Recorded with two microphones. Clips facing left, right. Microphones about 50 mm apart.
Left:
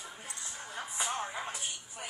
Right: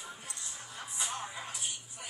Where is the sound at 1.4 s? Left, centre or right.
Left.